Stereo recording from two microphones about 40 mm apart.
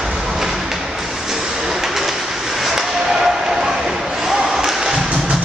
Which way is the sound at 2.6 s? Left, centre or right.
Centre.